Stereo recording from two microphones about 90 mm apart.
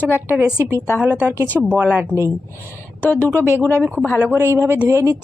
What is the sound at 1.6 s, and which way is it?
Speech, 15° right (ahead or behind).